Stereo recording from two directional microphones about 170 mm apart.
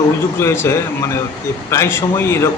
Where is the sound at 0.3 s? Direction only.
15° left (ahead or behind).